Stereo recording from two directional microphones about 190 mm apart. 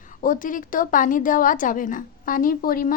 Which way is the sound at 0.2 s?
45° left (ahead or behind).